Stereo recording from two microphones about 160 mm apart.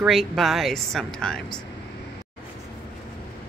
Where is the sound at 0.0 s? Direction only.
Centre (ahead or behind).